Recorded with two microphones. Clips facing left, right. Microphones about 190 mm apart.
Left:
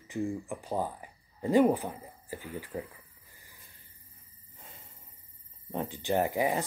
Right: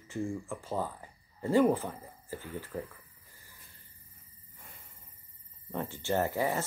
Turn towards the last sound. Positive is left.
turn(degrees=15)  # may be behind; listen again after turning